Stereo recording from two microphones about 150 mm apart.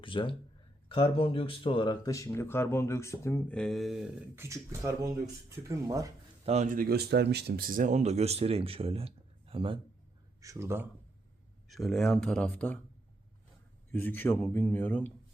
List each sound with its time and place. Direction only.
0.0 s speech: 35° left (ahead or behind); by 3.4 s 20° left (ahead or behind)
3.5 s speech: 5° left (ahead or behind)
4.4 s speech: 20° right (ahead or behind)
6.4 s speech: 50° right (ahead or behind)
10.4 s speech: 20° right (ahead or behind)
11.7 s speech: centre (ahead or behind)
13.9 s speech: 10° left (ahead or behind)